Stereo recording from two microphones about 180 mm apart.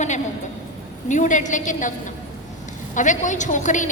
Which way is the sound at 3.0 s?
45° left (ahead or behind).